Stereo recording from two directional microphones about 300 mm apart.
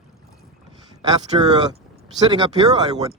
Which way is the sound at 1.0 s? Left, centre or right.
Centre.